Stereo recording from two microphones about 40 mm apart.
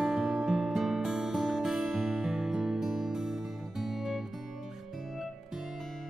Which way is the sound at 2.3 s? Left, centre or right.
Centre.